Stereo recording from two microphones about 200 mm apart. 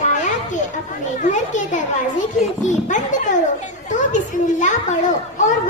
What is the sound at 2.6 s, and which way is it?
Speech, 40° left (ahead or behind).